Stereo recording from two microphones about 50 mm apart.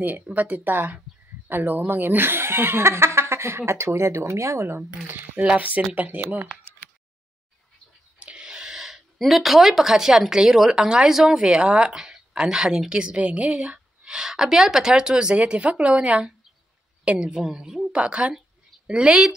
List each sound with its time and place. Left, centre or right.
0.0 s speech: right
5.4 s speech: right
8.2 s a sound: right
8.5 s speech: centre
11.3 s a woman's voice: right
17.3 s a woman's voice: centre